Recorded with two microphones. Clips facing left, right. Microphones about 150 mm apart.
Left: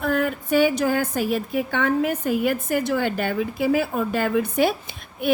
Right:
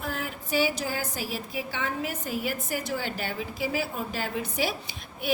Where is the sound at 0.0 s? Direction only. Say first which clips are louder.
Left 11 dB; 55° left (ahead or behind).